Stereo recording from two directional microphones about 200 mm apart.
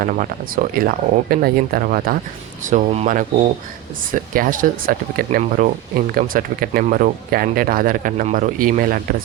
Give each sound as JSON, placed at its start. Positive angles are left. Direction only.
{"t": 0.0, "sound": "speech", "side_deg": -45}
{"t": 2.6, "sound": "speech", "side_deg": -35}